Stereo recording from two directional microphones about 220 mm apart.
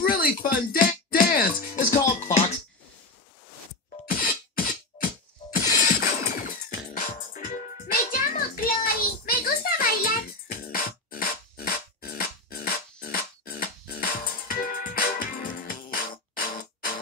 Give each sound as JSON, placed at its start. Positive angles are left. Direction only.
{"t": 0.0, "sound": "music", "side_deg": 40}
{"t": 4.1, "sound": "music", "side_deg": 40}